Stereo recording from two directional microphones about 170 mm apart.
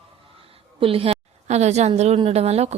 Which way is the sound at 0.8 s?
35° right (ahead or behind).